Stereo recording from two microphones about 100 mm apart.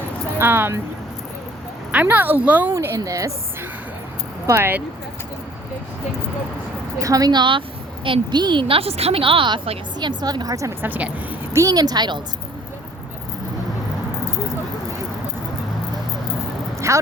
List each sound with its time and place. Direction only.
0.3 s speech: 20° right (ahead or behind)
1.9 s speech: 15° right (ahead or behind)
2.7 s speech: 30° right (ahead or behind)
4.4 s speech: 25° right (ahead or behind)
7.0 s speech: 35° right (ahead or behind)
8.6 s a woman's voice: 70° right (ahead or behind); by 10.7 s 35° right (ahead or behind)
10.8 s speech: 15° right (ahead or behind)
11.5 s speech: 35° right (ahead or behind)
16.9 s speech: 30° right (ahead or behind)